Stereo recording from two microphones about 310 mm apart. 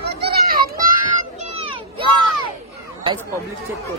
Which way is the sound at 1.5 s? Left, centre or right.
Centre.